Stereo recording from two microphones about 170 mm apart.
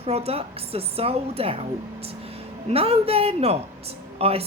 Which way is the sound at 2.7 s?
35° right (ahead or behind).